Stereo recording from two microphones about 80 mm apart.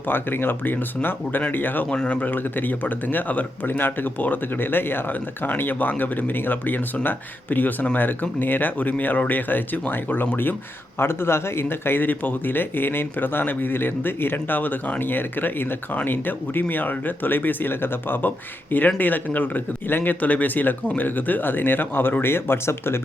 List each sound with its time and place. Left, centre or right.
0.1 s a man's voice: left